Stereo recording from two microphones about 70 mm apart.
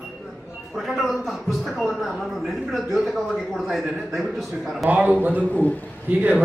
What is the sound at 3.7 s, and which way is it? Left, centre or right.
Speech, centre.